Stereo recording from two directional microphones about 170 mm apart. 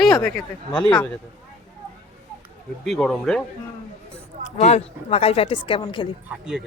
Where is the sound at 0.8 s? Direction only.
25° left (ahead or behind).